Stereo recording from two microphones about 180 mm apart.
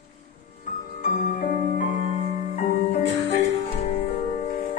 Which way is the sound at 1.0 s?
45° left (ahead or behind).